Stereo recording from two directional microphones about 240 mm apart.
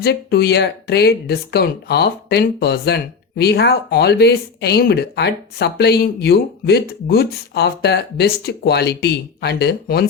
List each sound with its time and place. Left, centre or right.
0.0 s speech: left